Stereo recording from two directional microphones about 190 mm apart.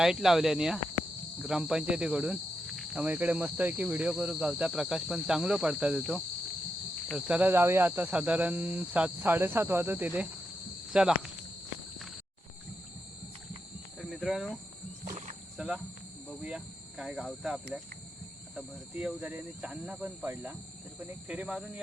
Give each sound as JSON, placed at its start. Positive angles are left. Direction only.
{"t": 0.0, "sound": "speech", "side_deg": 0}
{"t": 7.1, "sound": "cricket", "side_deg": -5}
{"t": 10.9, "sound": "speech", "side_deg": -5}
{"t": 14.0, "sound": "cricket", "side_deg": 0}
{"t": 15.0, "sound": "cricket", "side_deg": -40}
{"t": 15.5, "sound": "cricket", "side_deg": -5}
{"t": 16.4, "sound": "speech", "side_deg": -5}
{"t": 18.5, "sound": "cricket", "side_deg": -5}
{"t": 21.1, "sound": "speech", "side_deg": -5}